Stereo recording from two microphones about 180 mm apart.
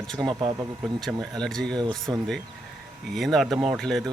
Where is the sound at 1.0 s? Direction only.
Centre (ahead or behind).